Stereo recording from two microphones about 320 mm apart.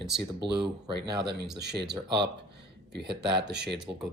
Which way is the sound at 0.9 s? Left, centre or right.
Right.